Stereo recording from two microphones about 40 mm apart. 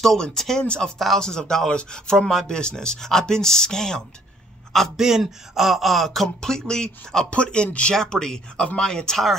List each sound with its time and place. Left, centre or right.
0.4 s speech: centre
0.7 s speech: left
0.9 s a sound: centre
1.2 s speech: centre
4.9 s a sound: centre
6.2 s speech: centre
7.2 s speech: left
7.9 s speech: centre